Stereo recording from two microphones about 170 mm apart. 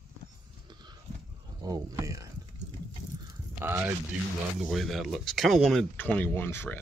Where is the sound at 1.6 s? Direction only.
20° right (ahead or behind).